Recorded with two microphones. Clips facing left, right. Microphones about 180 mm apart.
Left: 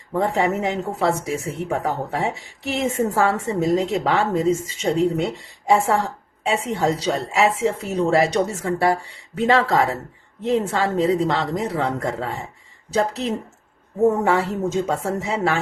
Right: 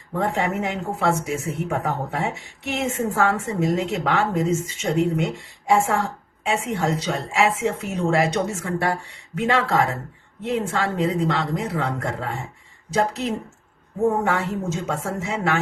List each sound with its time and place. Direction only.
0.2 s a woman's voice: 35° left (ahead or behind)
2.6 s a woman's voice: 35° left (ahead or behind)